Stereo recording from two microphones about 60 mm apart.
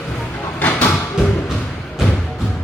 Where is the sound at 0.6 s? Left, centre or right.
Left.